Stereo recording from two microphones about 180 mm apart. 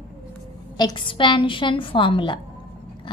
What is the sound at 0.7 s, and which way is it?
A woman's voice, 25° left (ahead or behind).